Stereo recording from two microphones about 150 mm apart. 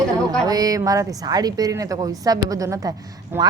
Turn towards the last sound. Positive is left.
turn(degrees=-15)  # may be behind; listen again after turning